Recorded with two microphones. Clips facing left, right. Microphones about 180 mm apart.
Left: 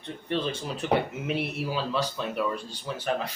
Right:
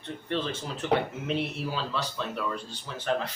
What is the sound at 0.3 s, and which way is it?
Speech, 15° left (ahead or behind).